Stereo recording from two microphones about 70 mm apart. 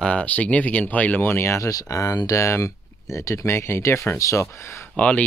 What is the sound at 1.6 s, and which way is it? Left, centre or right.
Speech, left.